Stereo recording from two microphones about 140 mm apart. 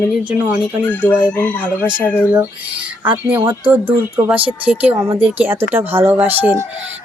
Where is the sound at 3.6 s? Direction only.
15° right (ahead or behind).